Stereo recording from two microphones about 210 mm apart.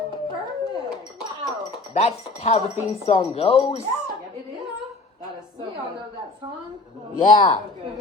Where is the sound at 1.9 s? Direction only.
30° left (ahead or behind).